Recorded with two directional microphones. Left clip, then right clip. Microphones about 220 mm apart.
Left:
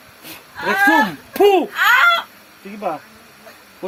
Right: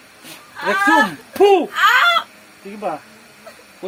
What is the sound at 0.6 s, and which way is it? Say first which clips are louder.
Speech: even; 10° right (ahead or behind).